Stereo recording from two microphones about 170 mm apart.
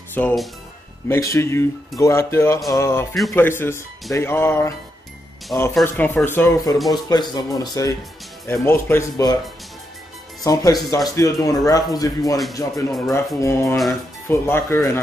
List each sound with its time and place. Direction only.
0.1 s a man's voice: 10° left (ahead or behind)
5.8 s a man's voice: 5° left (ahead or behind); by 9.4 s 20° left (ahead or behind)
10.4 s a man's voice: 20° left (ahead or behind)